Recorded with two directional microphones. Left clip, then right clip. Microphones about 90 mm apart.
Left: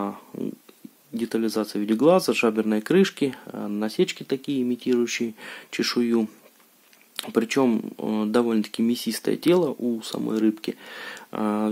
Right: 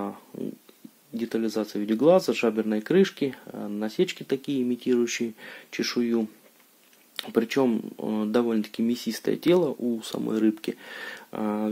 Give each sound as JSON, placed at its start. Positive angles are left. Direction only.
{"t": 0.0, "sound": "a sound", "side_deg": 30}
{"t": 1.1, "sound": "speech", "side_deg": 25}
{"t": 5.4, "sound": "speech", "side_deg": 35}
{"t": 11.2, "sound": "speech", "side_deg": 30}